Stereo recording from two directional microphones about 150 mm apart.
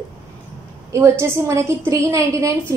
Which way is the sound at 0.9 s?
20° right (ahead or behind).